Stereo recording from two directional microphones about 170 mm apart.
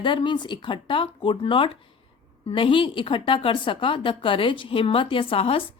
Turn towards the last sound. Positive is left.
turn(degrees=35)  # may be behind; listen again after turning